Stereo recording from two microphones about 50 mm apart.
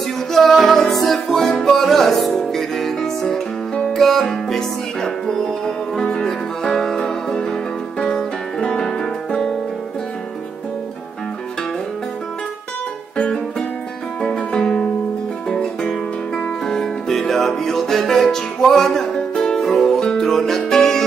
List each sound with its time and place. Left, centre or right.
0.3 s music: centre
13.2 s music: centre
16.6 s music: centre